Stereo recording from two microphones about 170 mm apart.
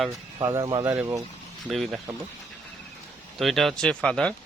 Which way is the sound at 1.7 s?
Centre (ahead or behind).